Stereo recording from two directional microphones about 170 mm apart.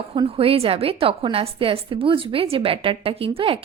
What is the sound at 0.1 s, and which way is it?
A woman's voice, 35° right (ahead or behind).